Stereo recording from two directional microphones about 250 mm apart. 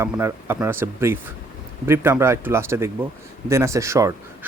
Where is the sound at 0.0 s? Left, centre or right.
Centre.